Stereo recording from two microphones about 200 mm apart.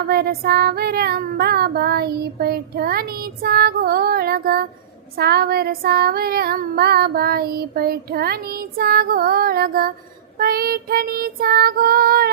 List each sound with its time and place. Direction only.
0.1 s child singing: 50° right (ahead or behind)